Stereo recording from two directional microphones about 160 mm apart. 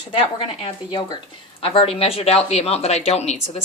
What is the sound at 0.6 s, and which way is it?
Speech, 40° left (ahead or behind).